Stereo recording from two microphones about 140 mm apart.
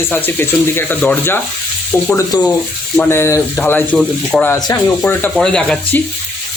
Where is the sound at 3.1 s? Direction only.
20° left (ahead or behind).